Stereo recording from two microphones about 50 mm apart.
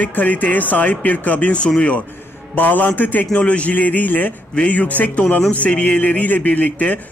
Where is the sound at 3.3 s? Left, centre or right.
Left.